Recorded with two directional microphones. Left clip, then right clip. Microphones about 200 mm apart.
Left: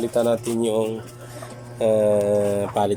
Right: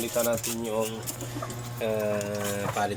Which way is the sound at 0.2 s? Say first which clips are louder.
Left 7 dB; 20° left (ahead or behind).